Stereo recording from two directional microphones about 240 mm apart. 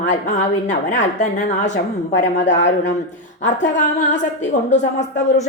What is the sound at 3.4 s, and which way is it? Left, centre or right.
A woman's voice, left.